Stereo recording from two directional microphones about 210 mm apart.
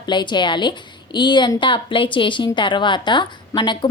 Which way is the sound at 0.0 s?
20° left (ahead or behind).